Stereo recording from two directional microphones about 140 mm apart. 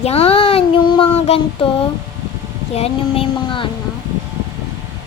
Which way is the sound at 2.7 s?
45° left (ahead or behind).